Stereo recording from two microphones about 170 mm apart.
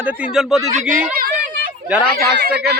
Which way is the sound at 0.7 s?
45° right (ahead or behind).